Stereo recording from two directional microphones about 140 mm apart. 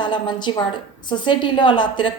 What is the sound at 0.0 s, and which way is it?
A woman's voice, 35° left (ahead or behind).